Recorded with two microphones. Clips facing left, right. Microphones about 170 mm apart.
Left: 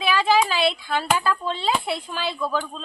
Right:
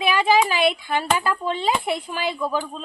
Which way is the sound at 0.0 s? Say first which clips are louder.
Right 1 dB; 15° right (ahead or behind).